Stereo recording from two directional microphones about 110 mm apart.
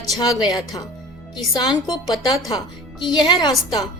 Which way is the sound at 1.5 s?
40° left (ahead or behind).